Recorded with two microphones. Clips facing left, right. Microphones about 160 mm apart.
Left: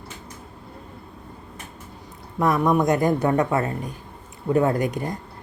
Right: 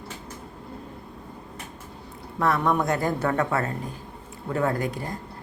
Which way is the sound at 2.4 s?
15° left (ahead or behind).